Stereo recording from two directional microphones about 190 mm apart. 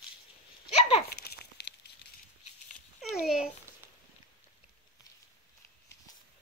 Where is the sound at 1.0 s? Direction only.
55° left (ahead or behind).